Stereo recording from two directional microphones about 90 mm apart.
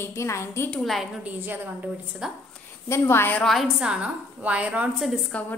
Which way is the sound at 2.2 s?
5° right (ahead or behind).